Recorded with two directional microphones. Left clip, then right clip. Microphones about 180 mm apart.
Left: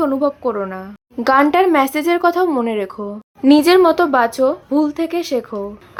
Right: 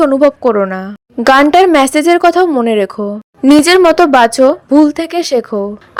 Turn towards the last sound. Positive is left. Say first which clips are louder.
# right 7 dB
turn(degrees=-30)  # may be behind; listen again after turning